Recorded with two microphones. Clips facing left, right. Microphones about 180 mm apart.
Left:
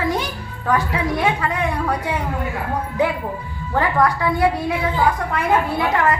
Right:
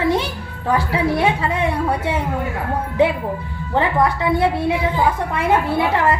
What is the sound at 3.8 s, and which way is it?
A woman's voice, 25° right (ahead or behind).